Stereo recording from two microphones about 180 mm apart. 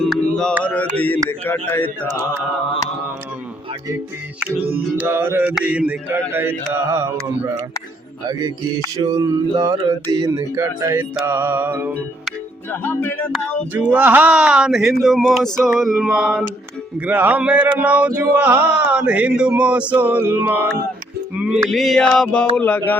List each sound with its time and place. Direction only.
0.0 s mantra: 5° left (ahead or behind)
1.3 s speech: 10° left (ahead or behind)
4.7 s mantra: 10° right (ahead or behind)
8.3 s music: 20° right (ahead or behind)
9.0 s mantra: 20° right (ahead or behind)
12.7 s speech: 10° left (ahead or behind)
13.3 s speech: 10° right (ahead or behind)
17.1 s mantra: 10° right (ahead or behind)
21.3 s speech: 5° right (ahead or behind)